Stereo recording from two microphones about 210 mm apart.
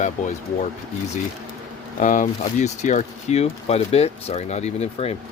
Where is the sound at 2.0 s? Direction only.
35° left (ahead or behind).